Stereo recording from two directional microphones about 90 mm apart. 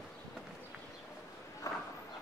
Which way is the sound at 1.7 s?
35° left (ahead or behind).